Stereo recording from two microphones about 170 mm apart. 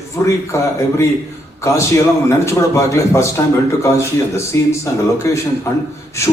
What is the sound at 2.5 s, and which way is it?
A man's voice, 15° left (ahead or behind).